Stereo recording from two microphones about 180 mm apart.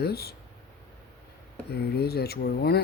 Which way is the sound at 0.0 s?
60° left (ahead or behind).